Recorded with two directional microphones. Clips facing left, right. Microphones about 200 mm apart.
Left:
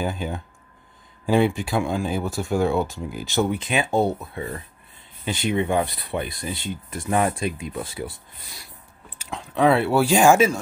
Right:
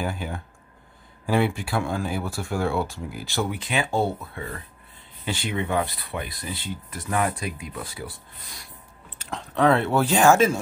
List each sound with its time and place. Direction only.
0.0 s speech: 20° left (ahead or behind)
9.2 s speech: 10° left (ahead or behind)